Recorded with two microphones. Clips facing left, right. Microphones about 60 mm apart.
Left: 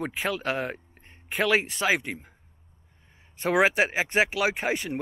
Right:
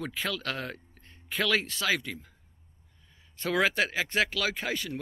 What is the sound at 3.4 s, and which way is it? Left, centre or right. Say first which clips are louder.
Speech: left 5 dB; left.